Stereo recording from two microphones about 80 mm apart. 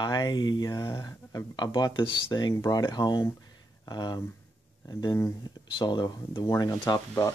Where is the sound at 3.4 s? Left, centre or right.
Left.